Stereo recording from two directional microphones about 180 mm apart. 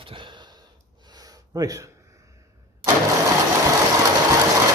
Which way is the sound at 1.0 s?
20° right (ahead or behind).